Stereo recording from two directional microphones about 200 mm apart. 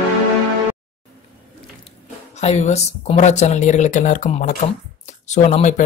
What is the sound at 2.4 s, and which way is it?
Speech, 35° left (ahead or behind).